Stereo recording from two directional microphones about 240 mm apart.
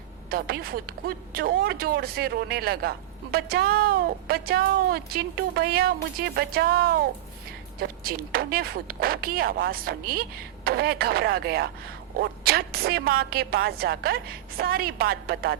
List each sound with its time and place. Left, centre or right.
0.3 s speech: right